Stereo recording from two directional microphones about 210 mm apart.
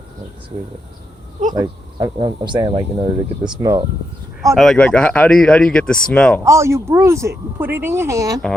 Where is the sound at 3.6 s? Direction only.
15° right (ahead or behind).